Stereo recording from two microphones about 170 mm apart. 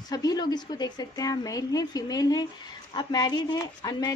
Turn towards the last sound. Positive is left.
turn(degrees=25)  # may be behind; listen again after turning